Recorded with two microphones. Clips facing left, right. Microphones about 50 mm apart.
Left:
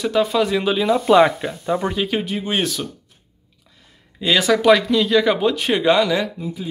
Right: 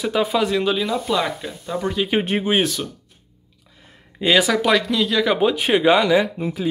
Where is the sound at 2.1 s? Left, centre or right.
Right.